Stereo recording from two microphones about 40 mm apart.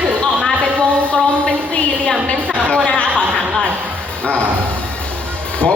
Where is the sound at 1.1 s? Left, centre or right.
Left.